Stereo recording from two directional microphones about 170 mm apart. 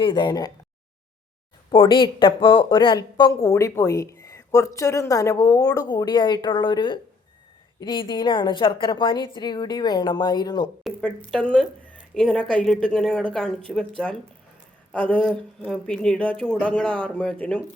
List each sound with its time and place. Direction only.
0.0 s speech: 25° left (ahead or behind)
1.7 s speech: 30° left (ahead or behind)
11.3 s speech: 5° left (ahead or behind)
14.9 s speech: 10° left (ahead or behind)